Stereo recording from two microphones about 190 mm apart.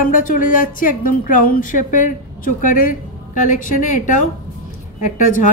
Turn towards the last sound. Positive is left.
turn(degrees=45)  # may be behind; listen again after turning